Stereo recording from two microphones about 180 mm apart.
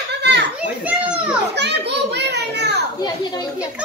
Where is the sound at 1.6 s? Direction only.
70° right (ahead or behind).